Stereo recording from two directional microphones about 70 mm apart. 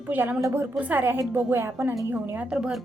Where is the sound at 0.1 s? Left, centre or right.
Right.